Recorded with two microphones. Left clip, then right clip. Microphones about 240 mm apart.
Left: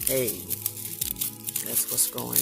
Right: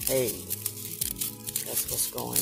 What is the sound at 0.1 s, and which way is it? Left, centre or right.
Speech, centre.